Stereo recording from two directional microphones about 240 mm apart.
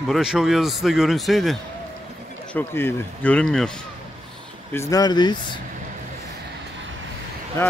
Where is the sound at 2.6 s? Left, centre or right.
Centre.